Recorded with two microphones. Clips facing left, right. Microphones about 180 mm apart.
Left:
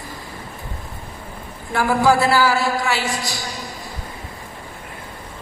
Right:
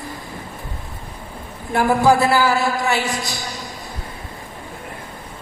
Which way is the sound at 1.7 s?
20° right (ahead or behind).